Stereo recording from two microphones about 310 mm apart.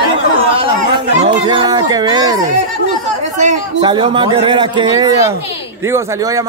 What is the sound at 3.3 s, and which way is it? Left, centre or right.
Speech, centre.